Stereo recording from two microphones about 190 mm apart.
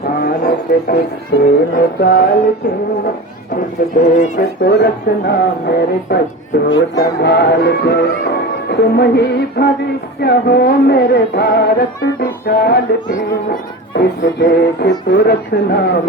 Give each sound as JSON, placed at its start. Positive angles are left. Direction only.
{"t": 0.2, "sound": "speech", "side_deg": 55}
{"t": 4.0, "sound": "speech", "side_deg": 55}
{"t": 13.9, "sound": "speech", "side_deg": 60}